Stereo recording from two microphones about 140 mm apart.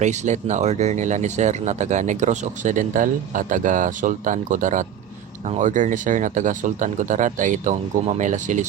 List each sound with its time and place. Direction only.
0.0 s speech: 60° right (ahead or behind)